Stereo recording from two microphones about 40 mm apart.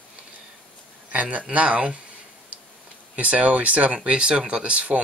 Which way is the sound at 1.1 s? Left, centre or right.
Right.